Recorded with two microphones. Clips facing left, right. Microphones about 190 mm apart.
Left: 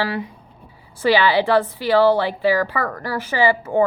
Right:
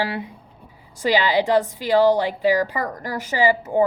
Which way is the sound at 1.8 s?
15° right (ahead or behind).